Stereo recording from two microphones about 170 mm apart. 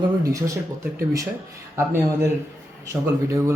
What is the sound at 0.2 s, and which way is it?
Speech, 20° right (ahead or behind).